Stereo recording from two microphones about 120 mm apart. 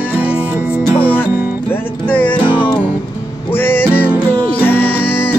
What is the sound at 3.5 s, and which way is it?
Music, 15° left (ahead or behind).